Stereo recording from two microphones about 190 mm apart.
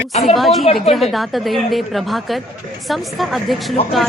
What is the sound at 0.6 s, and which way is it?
Speech, 35° left (ahead or behind).